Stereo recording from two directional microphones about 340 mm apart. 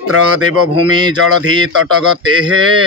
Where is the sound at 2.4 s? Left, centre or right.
Right.